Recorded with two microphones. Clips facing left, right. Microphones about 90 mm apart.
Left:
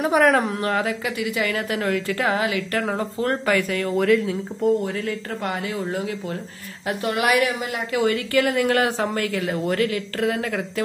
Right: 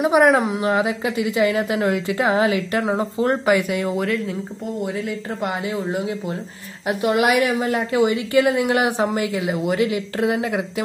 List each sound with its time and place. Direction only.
0.0 s a woman's voice: 15° right (ahead or behind)
3.9 s speech: centre (ahead or behind)
4.8 s a woman's voice: 15° right (ahead or behind)